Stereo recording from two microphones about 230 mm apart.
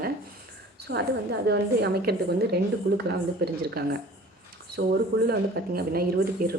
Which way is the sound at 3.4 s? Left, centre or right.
Right.